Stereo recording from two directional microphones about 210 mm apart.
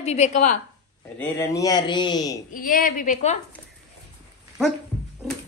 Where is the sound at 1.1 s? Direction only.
10° left (ahead or behind).